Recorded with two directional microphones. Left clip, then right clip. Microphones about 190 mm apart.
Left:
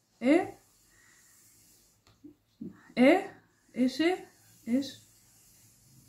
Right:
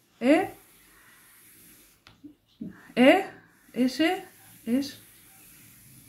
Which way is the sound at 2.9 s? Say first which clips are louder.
Right 4 dB; 25° right (ahead or behind).